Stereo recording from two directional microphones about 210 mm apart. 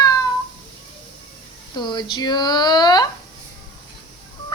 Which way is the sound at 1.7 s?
20° left (ahead or behind).